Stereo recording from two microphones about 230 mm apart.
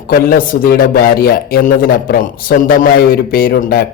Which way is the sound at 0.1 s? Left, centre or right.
Left.